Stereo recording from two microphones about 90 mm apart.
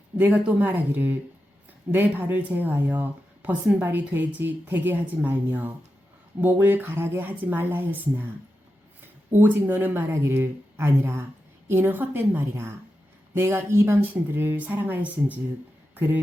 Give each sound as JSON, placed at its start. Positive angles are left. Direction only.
{"t": 0.2, "sound": "speech", "side_deg": -20}
{"t": 9.3, "sound": "speech", "side_deg": -20}